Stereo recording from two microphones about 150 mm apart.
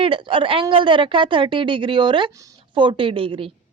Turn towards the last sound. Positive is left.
turn(degrees=-35)  # may be behind; listen again after turning